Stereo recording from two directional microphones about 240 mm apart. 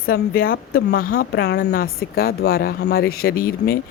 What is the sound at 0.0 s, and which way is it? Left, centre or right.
Speech, left.